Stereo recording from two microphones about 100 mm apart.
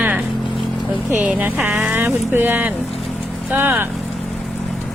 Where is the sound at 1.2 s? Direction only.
15° right (ahead or behind).